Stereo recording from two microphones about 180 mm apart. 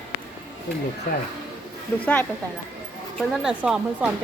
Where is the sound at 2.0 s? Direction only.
5° left (ahead or behind).